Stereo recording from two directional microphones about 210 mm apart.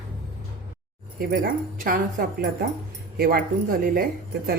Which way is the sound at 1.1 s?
40° right (ahead or behind).